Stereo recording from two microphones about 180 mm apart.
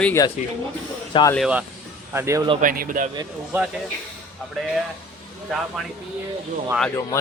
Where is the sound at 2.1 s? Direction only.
15° right (ahead or behind).